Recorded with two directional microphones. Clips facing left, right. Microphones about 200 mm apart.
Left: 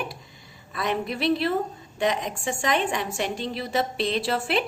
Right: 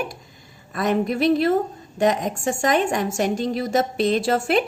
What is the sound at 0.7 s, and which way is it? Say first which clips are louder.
A woman's voice: right 6 dB; 45° right (ahead or behind).